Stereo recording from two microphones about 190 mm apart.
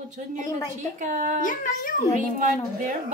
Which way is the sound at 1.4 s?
45° left (ahead or behind).